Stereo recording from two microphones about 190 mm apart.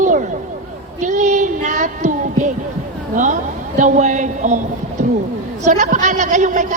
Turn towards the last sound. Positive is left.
turn(degrees=-40)  # may be behind; listen again after turning